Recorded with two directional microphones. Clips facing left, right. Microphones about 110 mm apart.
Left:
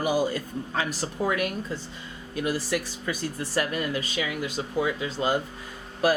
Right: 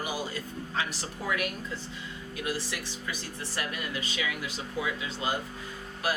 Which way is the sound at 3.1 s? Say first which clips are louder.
Left 9 dB; 45° left (ahead or behind).